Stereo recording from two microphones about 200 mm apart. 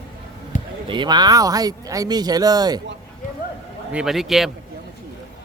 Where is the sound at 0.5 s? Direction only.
40° left (ahead or behind).